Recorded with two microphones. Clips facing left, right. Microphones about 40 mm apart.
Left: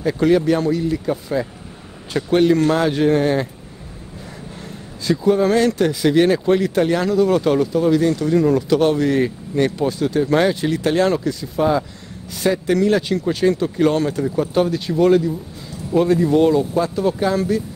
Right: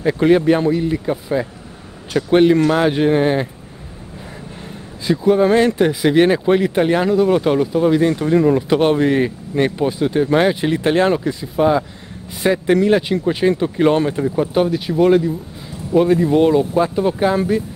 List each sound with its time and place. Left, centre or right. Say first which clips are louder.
0.0 s speech: right 2 dB; right
5.0 s speech: right 2 dB; centre